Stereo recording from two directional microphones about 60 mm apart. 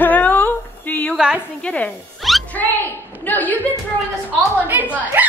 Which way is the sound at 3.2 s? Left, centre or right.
Left.